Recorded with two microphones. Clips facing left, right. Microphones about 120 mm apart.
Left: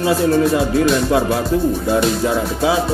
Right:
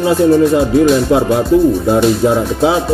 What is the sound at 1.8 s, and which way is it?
Speech, 30° right (ahead or behind).